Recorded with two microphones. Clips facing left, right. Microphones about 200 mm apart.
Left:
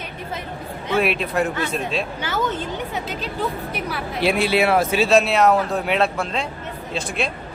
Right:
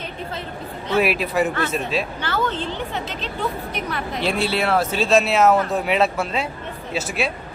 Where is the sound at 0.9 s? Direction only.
5° right (ahead or behind).